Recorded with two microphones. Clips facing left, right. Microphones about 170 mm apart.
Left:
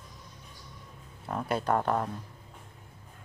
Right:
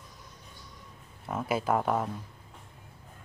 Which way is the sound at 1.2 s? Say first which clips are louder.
Even; 5° right (ahead or behind).